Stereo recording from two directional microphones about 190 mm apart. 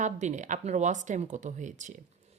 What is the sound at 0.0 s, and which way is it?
Speech, 40° right (ahead or behind).